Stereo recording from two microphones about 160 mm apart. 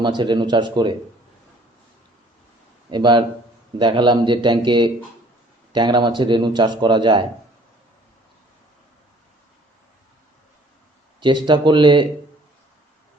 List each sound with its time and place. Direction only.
0.0 s speech: 30° right (ahead or behind)
2.9 s speech: 30° right (ahead or behind)
11.2 s speech: 30° right (ahead or behind)